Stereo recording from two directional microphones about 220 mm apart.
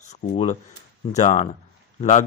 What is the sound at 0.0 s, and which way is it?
Speech, 30° left (ahead or behind).